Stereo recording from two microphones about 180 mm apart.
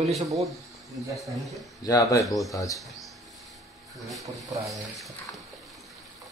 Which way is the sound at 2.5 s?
20° left (ahead or behind).